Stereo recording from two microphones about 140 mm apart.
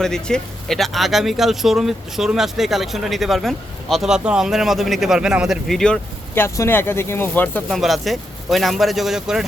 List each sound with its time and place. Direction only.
0.0 s speech: 5° left (ahead or behind)
6.3 s speech: 15° left (ahead or behind)
7.7 s speech: centre (ahead or behind)